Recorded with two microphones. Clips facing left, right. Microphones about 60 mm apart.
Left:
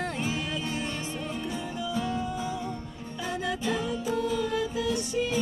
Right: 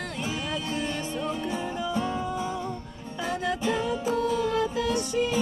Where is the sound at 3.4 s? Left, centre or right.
Right.